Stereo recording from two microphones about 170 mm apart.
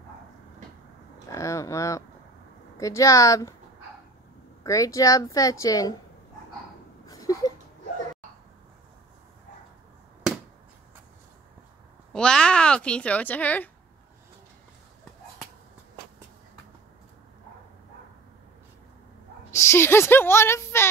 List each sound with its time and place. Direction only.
1.3 s a woman's voice: 20° left (ahead or behind)
4.6 s a woman's voice: 20° left (ahead or behind)
7.1 s a sound: 20° left (ahead or behind)
12.1 s a child's voice: 5° left (ahead or behind)
19.5 s a woman's voice: 15° left (ahead or behind)